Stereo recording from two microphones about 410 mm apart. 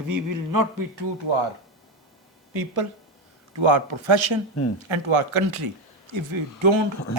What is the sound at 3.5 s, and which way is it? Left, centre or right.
Speech, right.